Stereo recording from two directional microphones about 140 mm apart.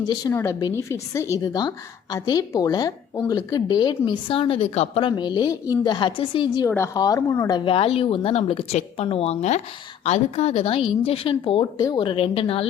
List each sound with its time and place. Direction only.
0.0 s a woman's voice: 30° left (ahead or behind); by 5.0 s 45° left (ahead or behind)
5.0 s a woman's voice: 35° left (ahead or behind)
6.7 s a woman's voice: 20° left (ahead or behind); by 12.6 s 40° left (ahead or behind)